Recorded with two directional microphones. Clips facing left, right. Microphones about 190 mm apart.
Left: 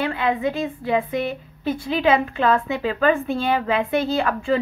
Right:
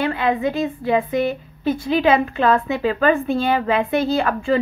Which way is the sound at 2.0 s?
45° right (ahead or behind).